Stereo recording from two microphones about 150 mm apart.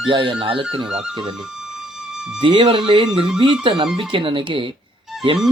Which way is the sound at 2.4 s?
35° right (ahead or behind).